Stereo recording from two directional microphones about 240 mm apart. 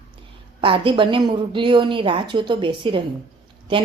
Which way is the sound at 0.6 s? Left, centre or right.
Right.